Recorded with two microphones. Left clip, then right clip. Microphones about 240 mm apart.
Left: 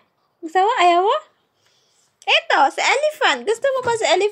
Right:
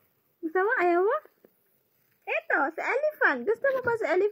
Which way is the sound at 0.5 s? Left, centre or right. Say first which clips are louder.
Left 10 dB; centre.